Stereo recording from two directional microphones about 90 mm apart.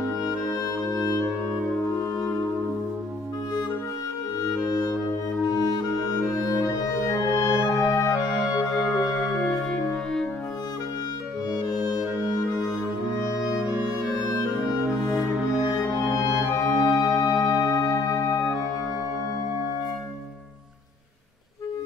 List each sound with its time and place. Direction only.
0.3 s music: 40° left (ahead or behind)
4.4 s clarinet: 45° left (ahead or behind)
5.5 s music: 45° left (ahead or behind)
7.8 s music: 35° left (ahead or behind)
8.7 s music: 5° right (ahead or behind)
11.5 s music: 45° left (ahead or behind)
13.6 s music: 15° right (ahead or behind)
16.1 s music: 40° left (ahead or behind)